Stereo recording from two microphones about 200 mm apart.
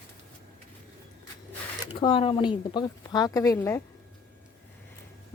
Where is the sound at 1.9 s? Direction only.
25° left (ahead or behind).